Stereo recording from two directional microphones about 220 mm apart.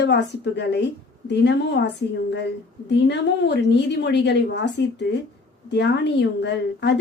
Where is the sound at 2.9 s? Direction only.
50° left (ahead or behind).